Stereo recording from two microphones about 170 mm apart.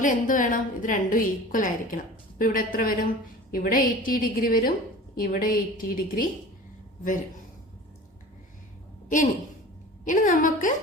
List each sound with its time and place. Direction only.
0.0 s a woman's voice: 50° left (ahead or behind)
10.0 s a woman's voice: 50° left (ahead or behind)